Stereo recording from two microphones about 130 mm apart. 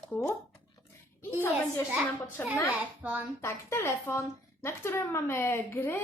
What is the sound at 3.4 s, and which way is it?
A woman's voice, 20° left (ahead or behind).